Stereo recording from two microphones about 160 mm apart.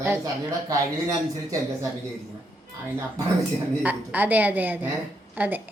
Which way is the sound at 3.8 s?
10° right (ahead or behind).